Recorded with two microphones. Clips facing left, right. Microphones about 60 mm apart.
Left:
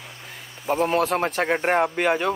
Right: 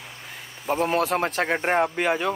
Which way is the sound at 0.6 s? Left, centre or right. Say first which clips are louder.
Left 1 dB; centre.